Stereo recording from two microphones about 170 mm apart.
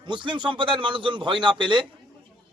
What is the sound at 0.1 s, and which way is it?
A man's voice, 30° right (ahead or behind).